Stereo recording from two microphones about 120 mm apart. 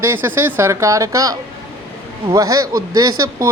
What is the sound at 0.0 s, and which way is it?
Speech, 20° right (ahead or behind).